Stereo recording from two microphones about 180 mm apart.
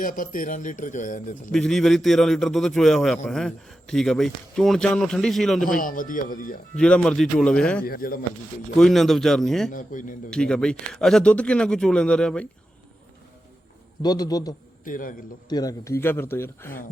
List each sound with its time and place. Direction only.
0.0 s a man's voice: 50° left (ahead or behind)
1.5 s speech: centre (ahead or behind)
5.6 s a man's voice: 50° left (ahead or behind)
6.7 s speech: 5° left (ahead or behind)
7.9 s a man's voice: 55° left (ahead or behind)
8.8 s speech: centre (ahead or behind)
9.6 s a man's voice: 45° left (ahead or behind)
10.2 s speech: 5° left (ahead or behind)
14.0 s a man's voice: 20° left (ahead or behind)
14.8 s a man's voice: 50° left (ahead or behind)
15.4 s speech: 20° left (ahead or behind)